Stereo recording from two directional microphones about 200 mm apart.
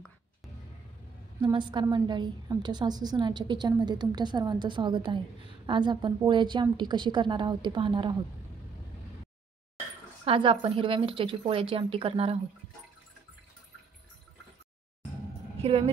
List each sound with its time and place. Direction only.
1.4 s a woman's voice: 20° right (ahead or behind)
10.2 s a woman's voice: 25° right (ahead or behind)